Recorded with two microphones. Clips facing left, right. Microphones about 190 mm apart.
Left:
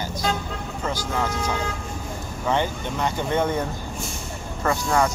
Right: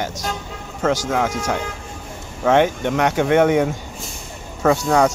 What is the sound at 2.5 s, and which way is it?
Speech, 70° right (ahead or behind).